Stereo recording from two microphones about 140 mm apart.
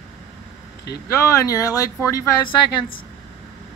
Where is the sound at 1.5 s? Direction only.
25° left (ahead or behind).